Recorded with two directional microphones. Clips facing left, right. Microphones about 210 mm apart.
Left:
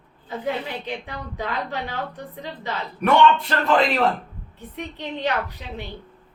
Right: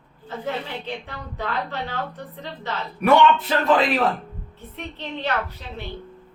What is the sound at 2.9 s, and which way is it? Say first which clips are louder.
A man's voice: right 1 dB; 5° right (ahead or behind).